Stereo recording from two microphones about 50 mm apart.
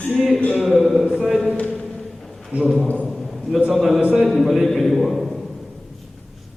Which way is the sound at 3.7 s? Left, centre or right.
Centre.